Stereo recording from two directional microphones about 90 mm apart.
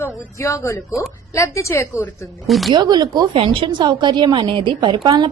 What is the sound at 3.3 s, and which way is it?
A woman's voice, 75° right (ahead or behind).